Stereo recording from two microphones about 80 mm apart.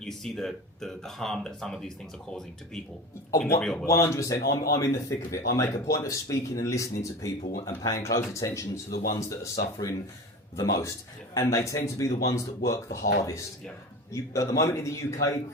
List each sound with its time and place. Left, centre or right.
0.0 s speech: centre
3.6 s speech: centre
3.8 s speech: left
11.3 s speech: left